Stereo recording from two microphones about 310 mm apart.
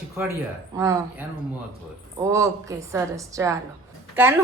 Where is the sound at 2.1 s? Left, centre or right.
Centre.